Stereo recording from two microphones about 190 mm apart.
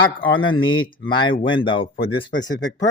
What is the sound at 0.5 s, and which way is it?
Speech, 90° left.